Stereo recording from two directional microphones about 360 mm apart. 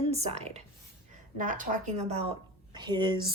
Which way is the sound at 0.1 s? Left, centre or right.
Centre.